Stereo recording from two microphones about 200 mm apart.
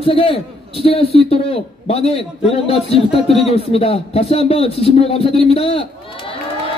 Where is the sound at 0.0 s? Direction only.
25° left (ahead or behind).